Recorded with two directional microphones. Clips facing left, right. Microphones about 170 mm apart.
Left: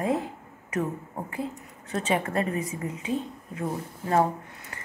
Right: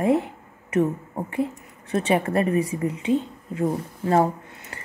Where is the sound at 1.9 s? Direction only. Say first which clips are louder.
Right 5 dB; 30° right (ahead or behind).